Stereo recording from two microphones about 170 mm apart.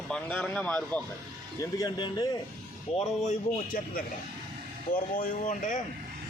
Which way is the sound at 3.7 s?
55° left (ahead or behind).